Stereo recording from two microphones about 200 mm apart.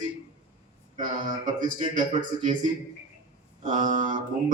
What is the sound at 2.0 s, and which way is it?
Mantra, 40° right (ahead or behind).